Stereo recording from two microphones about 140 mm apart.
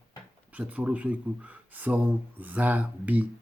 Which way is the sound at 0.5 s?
10° right (ahead or behind).